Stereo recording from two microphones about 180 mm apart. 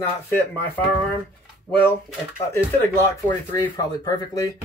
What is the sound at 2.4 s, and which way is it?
Speech, 15° left (ahead or behind).